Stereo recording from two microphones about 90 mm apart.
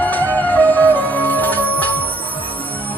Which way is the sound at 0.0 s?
20° left (ahead or behind).